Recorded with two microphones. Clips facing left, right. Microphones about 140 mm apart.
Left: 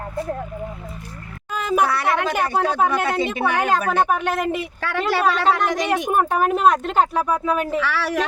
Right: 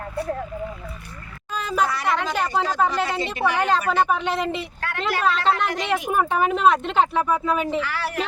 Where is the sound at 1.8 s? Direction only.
65° left (ahead or behind).